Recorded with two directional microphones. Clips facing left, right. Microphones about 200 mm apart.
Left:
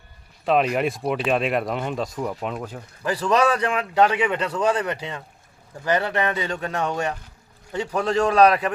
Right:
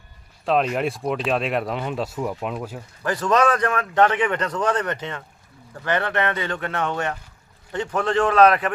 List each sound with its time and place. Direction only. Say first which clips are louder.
0.4 s speech: left 1 dB; centre (ahead or behind)
3.0 s a man's voice: even; 10° left (ahead or behind)